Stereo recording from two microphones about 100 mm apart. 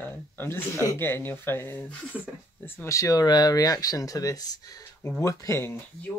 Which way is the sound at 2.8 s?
35° left (ahead or behind).